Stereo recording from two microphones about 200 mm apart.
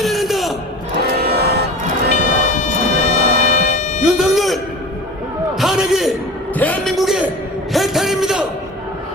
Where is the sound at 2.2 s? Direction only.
40° left (ahead or behind).